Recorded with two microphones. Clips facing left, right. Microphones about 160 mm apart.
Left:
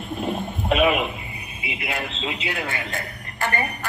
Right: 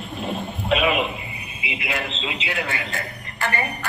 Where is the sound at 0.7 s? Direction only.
45° left (ahead or behind).